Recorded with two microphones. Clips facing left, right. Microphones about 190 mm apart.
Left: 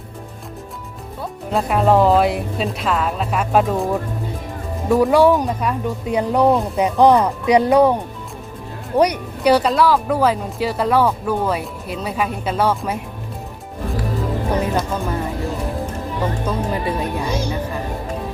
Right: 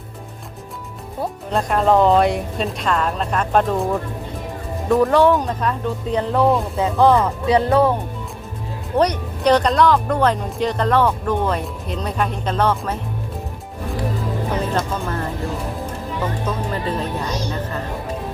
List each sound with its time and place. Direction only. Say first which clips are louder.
1.5 s speech: left 1 dB; 5° left (ahead or behind)
4.9 s speech: left 1 dB; 10° left (ahead or behind)
9.0 s speech: left 2 dB; 10° left (ahead or behind)
14.5 s speech: left 2 dB; 10° left (ahead or behind)
16.5 s speech: left 2 dB; 10° left (ahead or behind)